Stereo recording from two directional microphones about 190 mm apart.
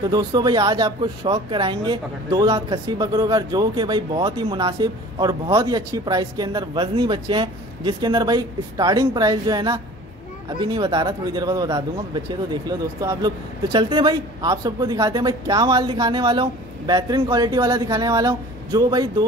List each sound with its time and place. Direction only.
0.1 s speech: 20° right (ahead or behind)